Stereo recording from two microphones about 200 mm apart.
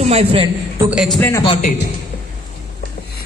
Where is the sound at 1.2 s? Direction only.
15° left (ahead or behind).